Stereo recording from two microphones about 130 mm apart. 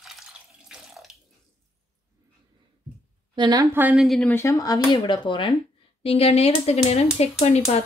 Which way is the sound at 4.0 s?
Centre (ahead or behind).